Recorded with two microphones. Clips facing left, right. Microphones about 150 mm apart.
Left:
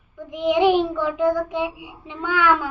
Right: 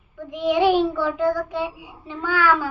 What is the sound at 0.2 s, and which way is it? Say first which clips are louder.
Child singing: left 1 dB; 20° left (ahead or behind).